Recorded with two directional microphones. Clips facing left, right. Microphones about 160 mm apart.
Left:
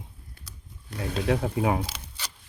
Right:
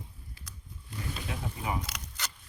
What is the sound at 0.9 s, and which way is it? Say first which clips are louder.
Speech: left 12 dB; 80° left.